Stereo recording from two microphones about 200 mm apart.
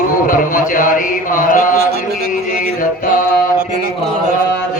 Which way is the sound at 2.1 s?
50° right (ahead or behind).